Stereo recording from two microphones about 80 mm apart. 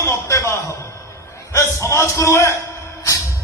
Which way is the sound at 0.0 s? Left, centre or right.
Left.